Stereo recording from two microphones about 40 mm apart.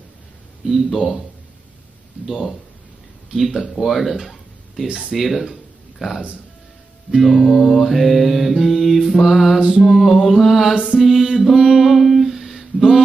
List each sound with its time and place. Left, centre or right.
0.9 s mantra: centre
3.3 s speech: centre
3.8 s a sound: centre
4.8 s speech: right
5.1 s speech: centre
7.1 s mantra: centre
11.3 s music: centre